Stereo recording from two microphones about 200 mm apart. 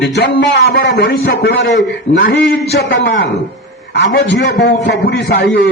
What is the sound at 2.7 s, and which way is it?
Speech, 65° left (ahead or behind).